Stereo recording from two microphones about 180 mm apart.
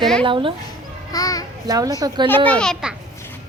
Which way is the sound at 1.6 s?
20° right (ahead or behind).